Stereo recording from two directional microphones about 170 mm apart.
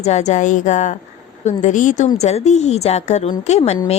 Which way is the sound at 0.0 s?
40° left (ahead or behind).